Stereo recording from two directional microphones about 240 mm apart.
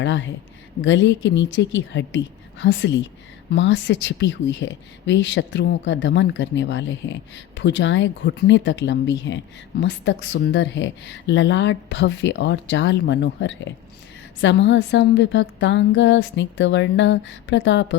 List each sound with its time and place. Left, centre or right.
0.0 s speech: left